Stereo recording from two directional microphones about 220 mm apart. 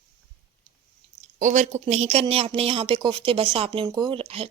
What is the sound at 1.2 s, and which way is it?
Speech, 35° right (ahead or behind).